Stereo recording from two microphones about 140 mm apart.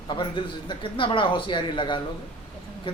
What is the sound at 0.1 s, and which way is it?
Speech, 35° left (ahead or behind).